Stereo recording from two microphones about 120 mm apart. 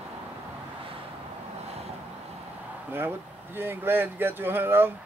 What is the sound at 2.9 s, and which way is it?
Speech, 15° right (ahead or behind).